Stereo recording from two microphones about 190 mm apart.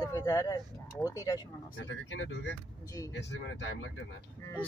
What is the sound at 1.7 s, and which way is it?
Speech, 75° left (ahead or behind).